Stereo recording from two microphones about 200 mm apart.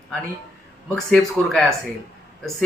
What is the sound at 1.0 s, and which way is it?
Speech, centre (ahead or behind).